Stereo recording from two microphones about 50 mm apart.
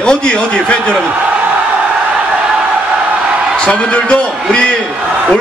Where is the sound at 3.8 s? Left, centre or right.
Left.